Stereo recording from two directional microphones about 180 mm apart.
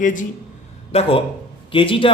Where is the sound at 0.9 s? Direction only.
35° left (ahead or behind).